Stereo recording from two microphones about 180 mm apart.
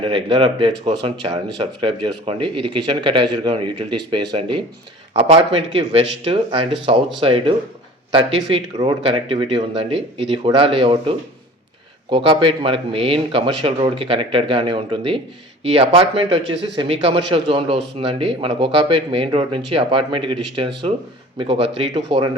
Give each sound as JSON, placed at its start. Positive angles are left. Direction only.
{"t": 0.0, "sound": "speech", "side_deg": -30}
{"t": 12.1, "sound": "speech", "side_deg": -30}